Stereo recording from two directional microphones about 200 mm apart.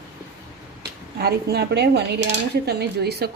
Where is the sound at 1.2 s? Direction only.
50° right (ahead or behind).